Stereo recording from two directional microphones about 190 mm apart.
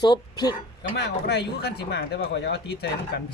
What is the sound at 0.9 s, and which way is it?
Speech, 65° left (ahead or behind).